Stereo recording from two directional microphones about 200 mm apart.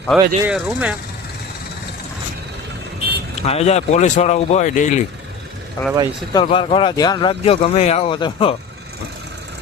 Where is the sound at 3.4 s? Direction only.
30° left (ahead or behind).